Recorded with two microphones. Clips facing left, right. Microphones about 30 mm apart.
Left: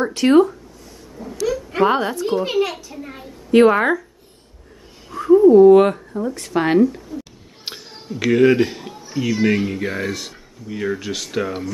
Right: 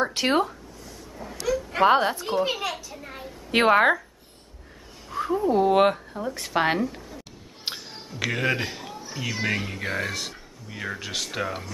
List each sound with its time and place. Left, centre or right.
0.0 s speech: centre
1.1 s a sound: centre
1.8 s speech: centre
2.2 s a child's voice: centre
3.5 s speech: centre
5.1 s speech: centre
5.5 s speech: right
5.9 s speech: centre
7.6 s speech: centre